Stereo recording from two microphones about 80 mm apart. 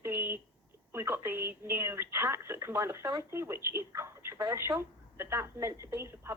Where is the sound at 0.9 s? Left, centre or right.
Right.